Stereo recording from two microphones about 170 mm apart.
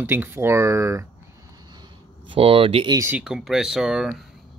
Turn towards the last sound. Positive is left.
turn(degrees=-5)  # may be behind; listen again after turning